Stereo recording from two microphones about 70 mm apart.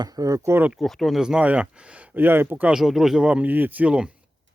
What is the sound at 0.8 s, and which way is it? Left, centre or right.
Speech, centre.